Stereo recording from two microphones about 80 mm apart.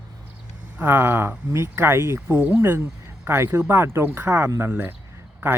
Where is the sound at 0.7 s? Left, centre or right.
Right.